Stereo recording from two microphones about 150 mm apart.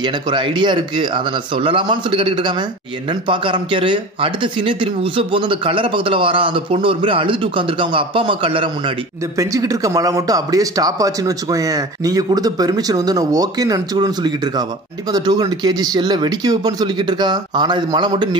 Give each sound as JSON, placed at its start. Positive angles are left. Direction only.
{"t": 0.0, "sound": "speech", "side_deg": -30}
{"t": 9.4, "sound": "speech", "side_deg": -20}